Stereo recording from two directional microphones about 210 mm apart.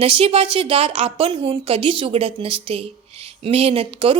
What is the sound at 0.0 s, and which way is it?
A woman's voice, 25° right (ahead or behind).